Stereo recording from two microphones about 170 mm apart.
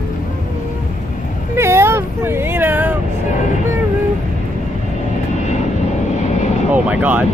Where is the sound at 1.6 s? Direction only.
15° right (ahead or behind).